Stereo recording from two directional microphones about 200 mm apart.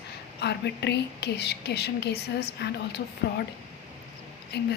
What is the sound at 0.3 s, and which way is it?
A woman's voice, 55° left (ahead or behind).